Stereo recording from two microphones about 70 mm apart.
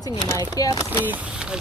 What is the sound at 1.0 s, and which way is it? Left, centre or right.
Speech, right.